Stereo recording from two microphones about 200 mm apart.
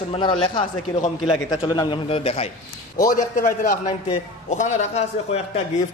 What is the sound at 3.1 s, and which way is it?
A man's voice, 45° left (ahead or behind).